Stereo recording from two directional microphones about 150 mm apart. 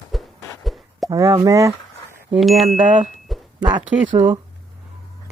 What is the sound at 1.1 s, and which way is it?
Speech, 20° right (ahead or behind).